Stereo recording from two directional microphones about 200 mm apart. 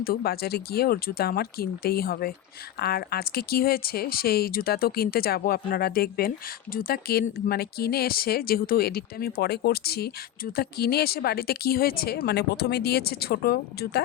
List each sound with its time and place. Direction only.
0.0 s speech: 50° left (ahead or behind)